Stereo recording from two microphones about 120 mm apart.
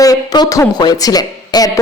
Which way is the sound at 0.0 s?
30° left (ahead or behind).